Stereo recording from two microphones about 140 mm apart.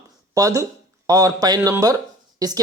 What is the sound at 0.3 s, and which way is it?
A man's voice, 25° right (ahead or behind).